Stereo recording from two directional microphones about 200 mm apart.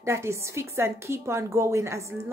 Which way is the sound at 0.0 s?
15° right (ahead or behind).